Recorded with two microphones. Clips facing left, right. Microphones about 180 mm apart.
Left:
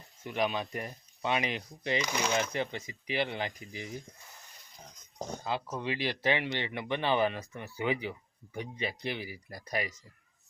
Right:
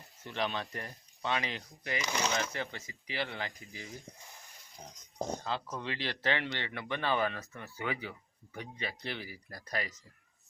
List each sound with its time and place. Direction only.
0.2 s speech: 10° left (ahead or behind)
5.4 s speech: 10° left (ahead or behind)